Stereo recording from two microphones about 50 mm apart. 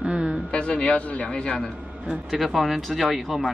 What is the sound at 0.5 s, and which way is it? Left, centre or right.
A man's voice, left.